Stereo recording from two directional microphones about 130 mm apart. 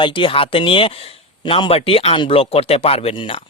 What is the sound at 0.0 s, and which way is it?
Speech, 40° left (ahead or behind).